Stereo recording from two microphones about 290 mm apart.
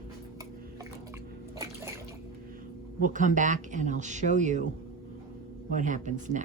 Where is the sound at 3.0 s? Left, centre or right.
Right.